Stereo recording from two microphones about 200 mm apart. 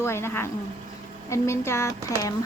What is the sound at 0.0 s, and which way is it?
Speech, 15° left (ahead or behind).